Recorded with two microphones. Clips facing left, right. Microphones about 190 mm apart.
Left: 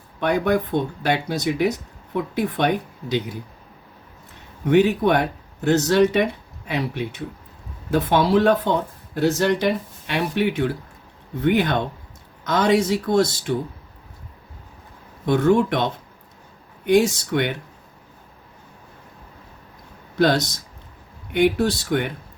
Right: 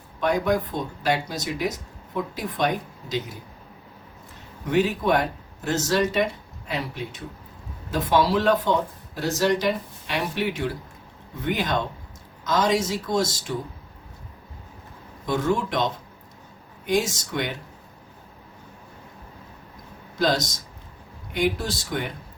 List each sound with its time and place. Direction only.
0.2 s speech: 60° left (ahead or behind)
4.6 s speech: 60° left (ahead or behind)
7.9 s speech: 55° left (ahead or behind)
15.3 s speech: 60° left (ahead or behind)
20.1 s speech: 60° left (ahead or behind)